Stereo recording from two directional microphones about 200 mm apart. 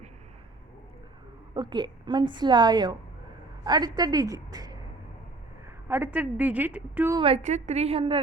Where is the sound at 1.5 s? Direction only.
20° right (ahead or behind).